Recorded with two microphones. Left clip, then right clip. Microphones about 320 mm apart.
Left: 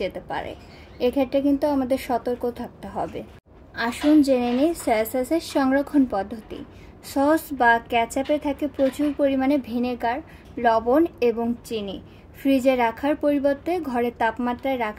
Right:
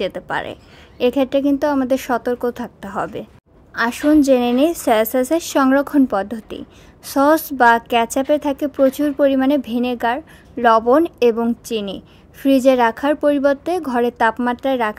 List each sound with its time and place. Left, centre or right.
0.0 s a woman's voice: right